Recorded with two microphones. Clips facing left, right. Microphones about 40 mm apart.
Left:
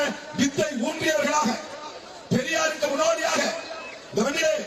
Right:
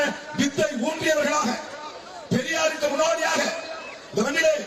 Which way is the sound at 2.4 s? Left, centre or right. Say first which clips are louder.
Right 1 dB; right.